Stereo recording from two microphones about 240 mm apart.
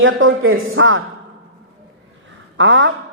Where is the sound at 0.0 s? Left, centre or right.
Right.